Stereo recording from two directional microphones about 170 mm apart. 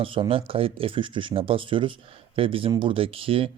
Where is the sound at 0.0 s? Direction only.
30° right (ahead or behind).